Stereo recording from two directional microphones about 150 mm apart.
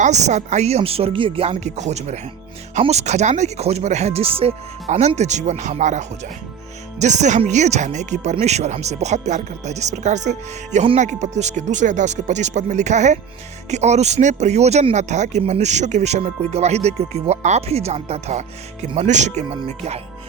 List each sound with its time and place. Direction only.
0.0 s speech: 50° right (ahead or behind)